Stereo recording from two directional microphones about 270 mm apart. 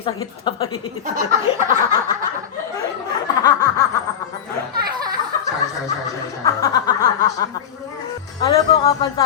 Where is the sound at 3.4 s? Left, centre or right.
Centre.